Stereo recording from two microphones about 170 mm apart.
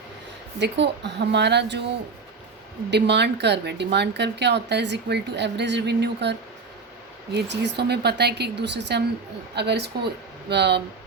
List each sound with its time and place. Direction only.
0.6 s a woman's voice: 90° right
2.9 s speech: 90° right
7.3 s speech: 90° right